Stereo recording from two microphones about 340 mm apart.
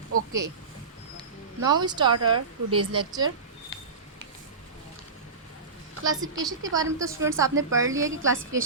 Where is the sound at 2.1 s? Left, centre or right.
Right.